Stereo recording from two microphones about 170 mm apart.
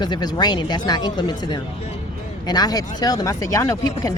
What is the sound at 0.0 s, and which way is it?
Speech, 25° left (ahead or behind).